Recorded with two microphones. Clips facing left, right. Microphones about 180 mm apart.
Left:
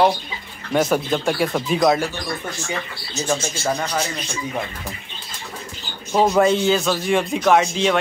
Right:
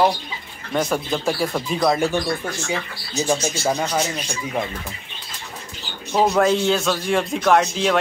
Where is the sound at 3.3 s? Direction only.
10° right (ahead or behind).